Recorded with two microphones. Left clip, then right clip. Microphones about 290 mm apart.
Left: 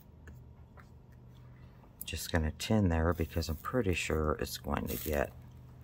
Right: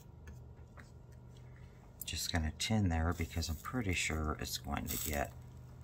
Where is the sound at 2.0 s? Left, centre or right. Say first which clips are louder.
Left 3 dB; centre.